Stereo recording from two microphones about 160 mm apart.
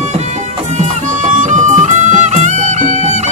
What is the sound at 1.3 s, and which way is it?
Music, 50° right (ahead or behind).